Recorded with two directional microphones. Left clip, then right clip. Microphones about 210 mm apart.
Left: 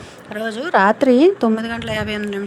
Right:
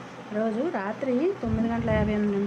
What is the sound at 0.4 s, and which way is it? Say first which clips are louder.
Speech: left 14 dB; 45° left (ahead or behind).